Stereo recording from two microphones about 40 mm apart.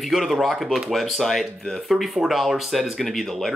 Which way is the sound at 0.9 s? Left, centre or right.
Centre.